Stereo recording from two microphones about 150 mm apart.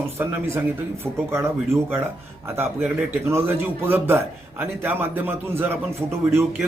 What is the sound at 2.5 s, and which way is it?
Speech, 10° right (ahead or behind).